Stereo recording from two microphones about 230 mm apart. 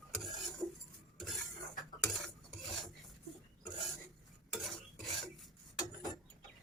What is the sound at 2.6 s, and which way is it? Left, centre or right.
Filing, centre.